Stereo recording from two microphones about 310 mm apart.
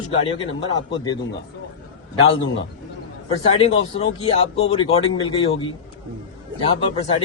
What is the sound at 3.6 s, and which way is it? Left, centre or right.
A man's voice, centre.